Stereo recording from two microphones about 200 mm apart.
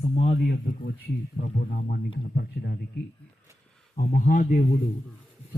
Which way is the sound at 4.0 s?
40° left (ahead or behind).